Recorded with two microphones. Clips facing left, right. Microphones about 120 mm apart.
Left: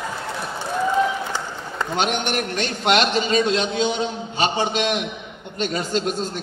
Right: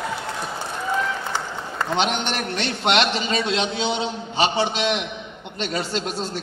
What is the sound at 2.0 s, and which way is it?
A man's voice, 50° left (ahead or behind).